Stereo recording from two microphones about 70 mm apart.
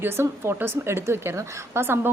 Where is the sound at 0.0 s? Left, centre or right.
Right.